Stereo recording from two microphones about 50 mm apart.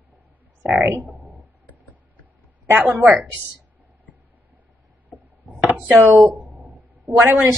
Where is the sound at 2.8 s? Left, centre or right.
Right.